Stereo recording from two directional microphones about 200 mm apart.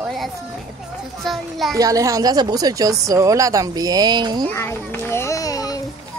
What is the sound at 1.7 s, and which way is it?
Speech, 15° right (ahead or behind).